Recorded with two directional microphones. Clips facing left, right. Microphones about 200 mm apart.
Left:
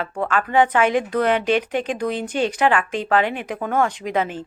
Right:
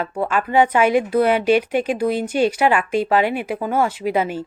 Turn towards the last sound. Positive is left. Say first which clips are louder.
# right 3 dB
turn(degrees=-10)  # may be behind; listen again after turning